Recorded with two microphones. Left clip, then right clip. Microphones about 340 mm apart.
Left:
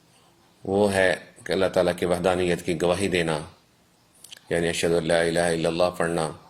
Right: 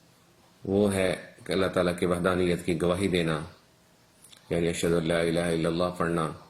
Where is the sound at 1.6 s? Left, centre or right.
Left.